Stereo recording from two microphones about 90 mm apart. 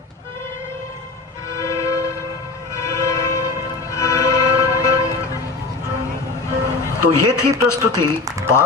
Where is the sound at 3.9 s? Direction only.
35° left (ahead or behind).